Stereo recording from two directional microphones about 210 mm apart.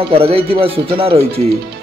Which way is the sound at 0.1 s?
25° right (ahead or behind).